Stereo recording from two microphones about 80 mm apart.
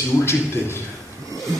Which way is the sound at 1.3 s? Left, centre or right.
Right.